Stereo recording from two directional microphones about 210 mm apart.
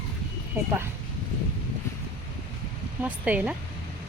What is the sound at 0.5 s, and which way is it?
Speech, 10° right (ahead or behind).